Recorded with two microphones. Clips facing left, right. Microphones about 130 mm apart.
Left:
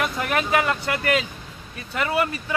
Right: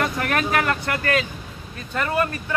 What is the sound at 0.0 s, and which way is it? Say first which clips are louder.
Vehicle: right 1 dB; 10° left (ahead or behind).